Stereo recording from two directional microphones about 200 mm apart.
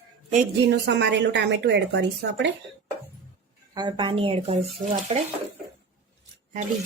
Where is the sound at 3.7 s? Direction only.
20° right (ahead or behind).